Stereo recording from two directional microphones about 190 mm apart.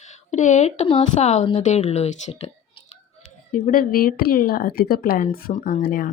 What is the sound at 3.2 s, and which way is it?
Speech, 45° left (ahead or behind).